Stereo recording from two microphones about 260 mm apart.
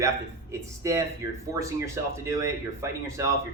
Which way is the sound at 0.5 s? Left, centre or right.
Centre.